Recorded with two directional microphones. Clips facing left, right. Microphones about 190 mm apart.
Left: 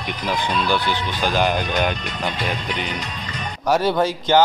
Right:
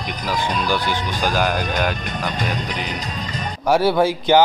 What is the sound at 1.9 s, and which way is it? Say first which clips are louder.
Speech: right 2 dB; 50° right (ahead or behind).